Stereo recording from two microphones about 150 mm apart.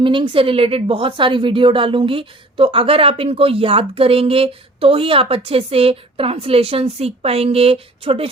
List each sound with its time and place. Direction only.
0.0 s a woman's voice: 35° right (ahead or behind)